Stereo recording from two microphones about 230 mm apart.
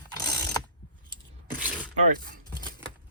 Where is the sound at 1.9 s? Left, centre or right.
Right.